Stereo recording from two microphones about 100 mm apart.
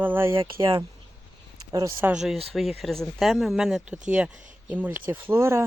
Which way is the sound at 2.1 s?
5° right (ahead or behind).